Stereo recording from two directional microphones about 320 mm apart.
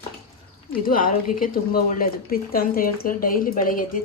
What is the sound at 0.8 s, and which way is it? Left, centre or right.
Speech, left.